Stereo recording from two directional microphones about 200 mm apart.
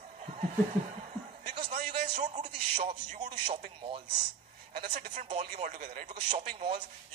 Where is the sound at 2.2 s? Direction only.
35° right (ahead or behind).